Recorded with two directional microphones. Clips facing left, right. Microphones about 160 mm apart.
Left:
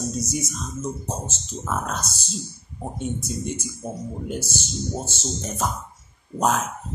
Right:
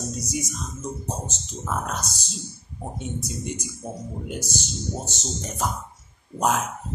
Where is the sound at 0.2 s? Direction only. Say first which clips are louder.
Left 2 dB; 15° right (ahead or behind).